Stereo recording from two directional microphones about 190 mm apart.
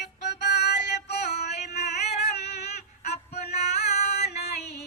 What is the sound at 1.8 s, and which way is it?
Music, 35° left (ahead or behind).